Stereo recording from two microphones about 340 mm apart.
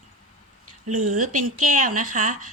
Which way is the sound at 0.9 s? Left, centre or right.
Right.